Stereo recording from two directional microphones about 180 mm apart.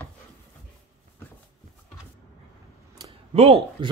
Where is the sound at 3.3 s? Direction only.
35° right (ahead or behind).